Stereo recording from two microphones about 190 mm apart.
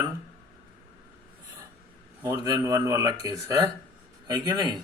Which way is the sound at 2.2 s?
15° right (ahead or behind).